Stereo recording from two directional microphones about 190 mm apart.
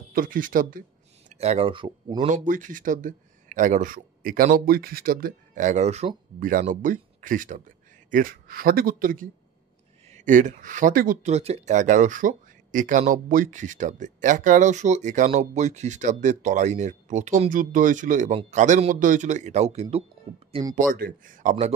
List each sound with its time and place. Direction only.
0.1 s speech: 45° right (ahead or behind)
1.3 s speech: 35° right (ahead or behind)
11.3 s speech: 35° right (ahead or behind)
20.7 s speech: 45° right (ahead or behind)